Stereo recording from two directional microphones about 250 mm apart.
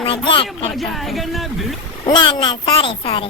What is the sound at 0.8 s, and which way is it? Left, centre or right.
Speech, centre.